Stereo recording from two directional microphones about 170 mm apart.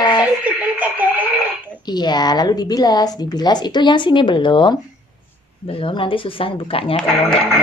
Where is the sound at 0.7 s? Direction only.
10° right (ahead or behind).